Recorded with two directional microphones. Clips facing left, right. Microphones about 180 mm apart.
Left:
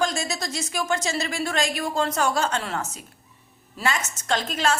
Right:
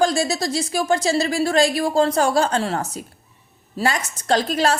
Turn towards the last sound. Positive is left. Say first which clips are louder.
# right 5 dB
turn(degrees=-35)  # may be behind; listen again after turning